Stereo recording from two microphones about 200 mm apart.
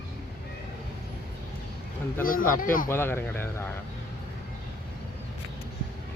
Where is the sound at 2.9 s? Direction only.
10° left (ahead or behind).